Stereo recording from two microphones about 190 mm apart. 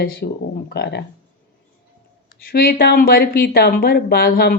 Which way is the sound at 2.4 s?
50° left (ahead or behind).